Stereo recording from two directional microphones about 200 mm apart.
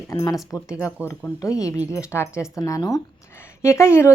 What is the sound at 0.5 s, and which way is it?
Speech, 15° left (ahead or behind).